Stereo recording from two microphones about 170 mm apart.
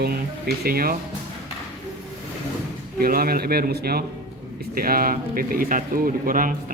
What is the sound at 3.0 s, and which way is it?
A man's voice, 60° right (ahead or behind).